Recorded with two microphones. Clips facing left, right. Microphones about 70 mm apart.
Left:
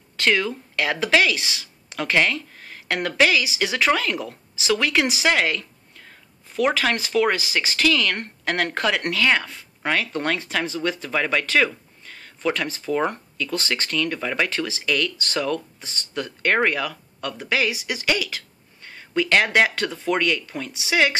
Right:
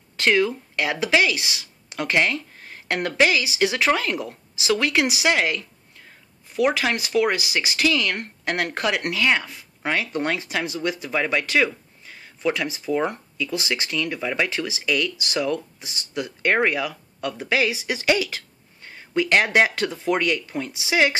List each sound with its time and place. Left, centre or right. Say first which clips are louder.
0.2 s speech: right 2 dB; right
5.2 s a sound: left 1 dB; centre
6.5 s speech: even; centre